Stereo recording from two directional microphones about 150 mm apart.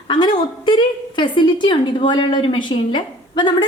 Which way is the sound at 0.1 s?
30° left (ahead or behind).